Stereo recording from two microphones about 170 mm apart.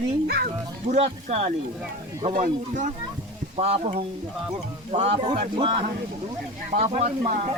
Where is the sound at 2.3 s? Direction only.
50° right (ahead or behind).